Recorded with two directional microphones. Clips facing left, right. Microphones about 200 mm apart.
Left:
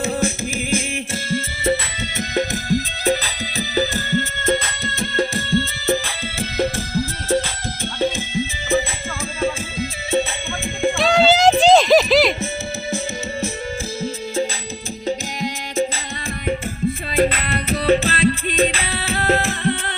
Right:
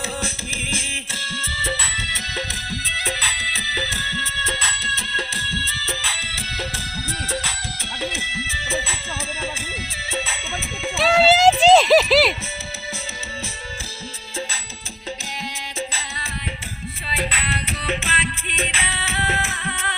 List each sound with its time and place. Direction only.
0.2 s music: 45° left (ahead or behind)
10.1 s music: 50° left (ahead or behind)
10.9 s music: 5° right (ahead or behind)
11.7 s a sound: 5° right (ahead or behind)
15.0 s music: 40° left (ahead or behind)
17.1 s music: 45° left (ahead or behind)